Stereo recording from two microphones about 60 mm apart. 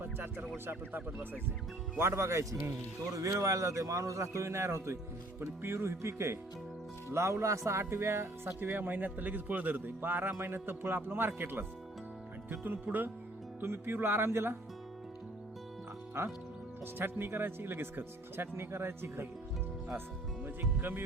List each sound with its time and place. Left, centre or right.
0.0 s speech: right
2.0 s speech: right
4.4 s speech: right
10.3 s speech: right
16.8 s speech: right
20.4 s speech: right